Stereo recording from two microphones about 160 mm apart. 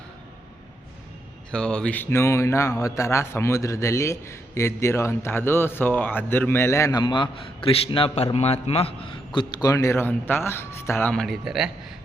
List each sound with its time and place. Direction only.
1.5 s speech: 5° left (ahead or behind)
11.1 s speech: centre (ahead or behind)